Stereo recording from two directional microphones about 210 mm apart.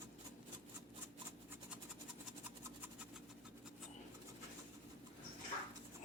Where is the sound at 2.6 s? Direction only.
10° right (ahead or behind).